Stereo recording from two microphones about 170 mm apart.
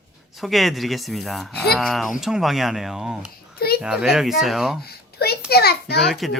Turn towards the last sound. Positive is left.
turn(degrees=0)  # may be behind; listen again after turning